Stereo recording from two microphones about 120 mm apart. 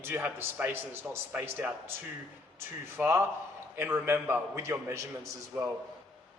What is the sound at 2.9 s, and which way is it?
A man's voice, 20° right (ahead or behind).